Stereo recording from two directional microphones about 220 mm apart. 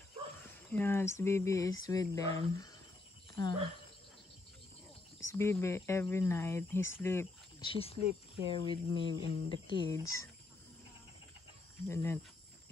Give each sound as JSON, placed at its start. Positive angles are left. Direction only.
{"t": 0.4, "sound": "speech", "side_deg": 10}
{"t": 5.3, "sound": "speech", "side_deg": 10}
{"t": 7.6, "sound": "speech", "side_deg": 25}
{"t": 11.9, "sound": "speech", "side_deg": 10}